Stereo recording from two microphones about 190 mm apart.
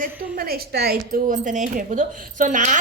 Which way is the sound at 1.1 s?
45° right (ahead or behind).